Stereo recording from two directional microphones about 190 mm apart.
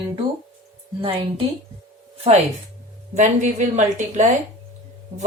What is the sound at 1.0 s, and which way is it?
Speech, 30° right (ahead or behind).